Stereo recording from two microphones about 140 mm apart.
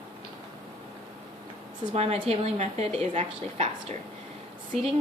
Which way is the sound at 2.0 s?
45° right (ahead or behind).